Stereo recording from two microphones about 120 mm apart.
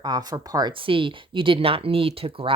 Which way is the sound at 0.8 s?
45° right (ahead or behind).